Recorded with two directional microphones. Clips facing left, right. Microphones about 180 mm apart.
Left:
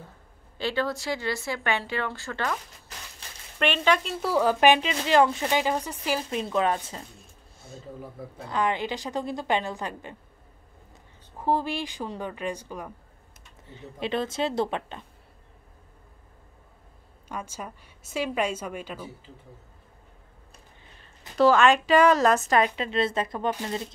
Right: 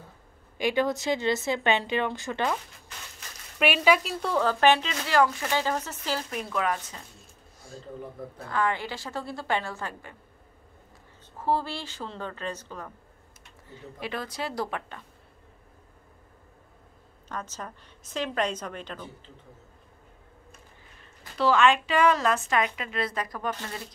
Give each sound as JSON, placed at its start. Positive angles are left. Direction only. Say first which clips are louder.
{"t": 0.6, "sound": "a woman's voice", "louder": "right 2 dB", "side_deg": -15}
{"t": 3.2, "sound": "a sound", "louder": "even", "side_deg": 30}
{"t": 3.5, "sound": "a woman's voice", "louder": "right 1 dB", "side_deg": -10}
{"t": 7.8, "sound": "speech", "louder": "right 1 dB", "side_deg": 5}
{"t": 8.5, "sound": "a woman's voice", "louder": "left 2 dB", "side_deg": 20}
{"t": 11.3, "sound": "a woman's voice", "louder": "left 2 dB", "side_deg": 15}
{"t": 13.7, "sound": "speech", "louder": "left 5 dB", "side_deg": 25}
{"t": 17.3, "sound": "a woman's voice", "louder": "left 1 dB", "side_deg": 10}
{"t": 21.4, "sound": "a woman's voice", "louder": "left 3 dB", "side_deg": 45}